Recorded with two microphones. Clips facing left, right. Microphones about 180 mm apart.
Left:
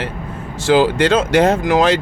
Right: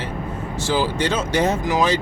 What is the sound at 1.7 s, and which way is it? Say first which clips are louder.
Speech: left 5 dB; 60° left (ahead or behind).